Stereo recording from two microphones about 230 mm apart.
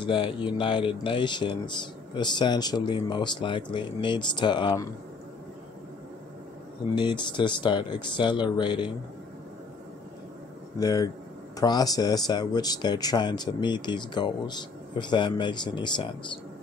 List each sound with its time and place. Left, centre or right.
0.0 s speech: left
7.0 s speech: centre
10.8 s speech: centre